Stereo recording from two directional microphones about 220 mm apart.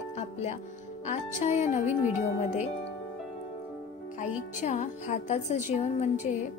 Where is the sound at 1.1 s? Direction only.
30° left (ahead or behind).